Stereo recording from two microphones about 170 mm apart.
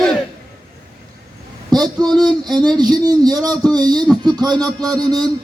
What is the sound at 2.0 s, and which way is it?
A man's voice, 25° right (ahead or behind).